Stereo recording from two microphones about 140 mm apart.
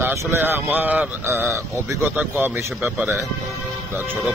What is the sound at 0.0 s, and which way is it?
Speech, 20° right (ahead or behind).